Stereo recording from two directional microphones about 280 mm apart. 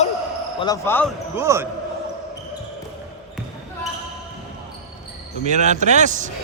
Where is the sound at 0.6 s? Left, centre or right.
Centre.